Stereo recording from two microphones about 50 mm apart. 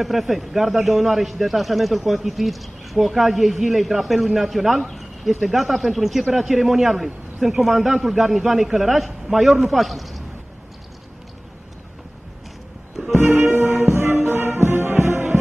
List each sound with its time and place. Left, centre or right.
0.0 s a man's voice: centre
13.2 s music: right
13.8 s music: right